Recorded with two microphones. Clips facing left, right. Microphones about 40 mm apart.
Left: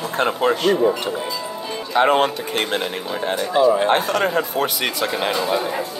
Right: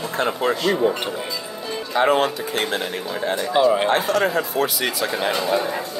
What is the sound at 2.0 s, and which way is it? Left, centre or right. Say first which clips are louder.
Speech: even; left.